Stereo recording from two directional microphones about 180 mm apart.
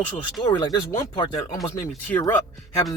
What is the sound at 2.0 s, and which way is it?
Speech, 10° left (ahead or behind).